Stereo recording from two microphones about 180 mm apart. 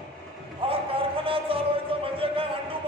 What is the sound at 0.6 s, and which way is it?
Music, 30° right (ahead or behind).